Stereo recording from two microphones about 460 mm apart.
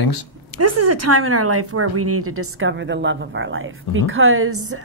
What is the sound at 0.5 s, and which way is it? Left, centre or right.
A woman's voice, right.